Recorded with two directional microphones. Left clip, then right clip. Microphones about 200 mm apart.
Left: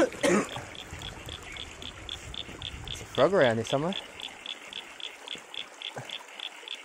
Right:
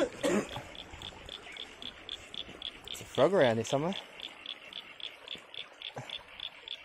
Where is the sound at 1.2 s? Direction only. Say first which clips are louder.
Left 4 dB; 5° left (ahead or behind).